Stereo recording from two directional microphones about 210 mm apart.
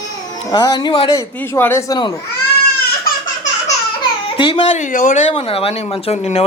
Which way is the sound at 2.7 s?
45° left (ahead or behind).